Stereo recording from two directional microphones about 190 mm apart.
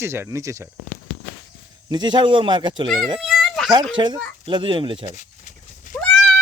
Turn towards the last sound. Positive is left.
turn(degrees=10)  # may be behind; listen again after turning